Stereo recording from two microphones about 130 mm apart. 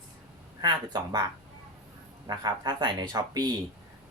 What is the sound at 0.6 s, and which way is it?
Speech, 35° right (ahead or behind).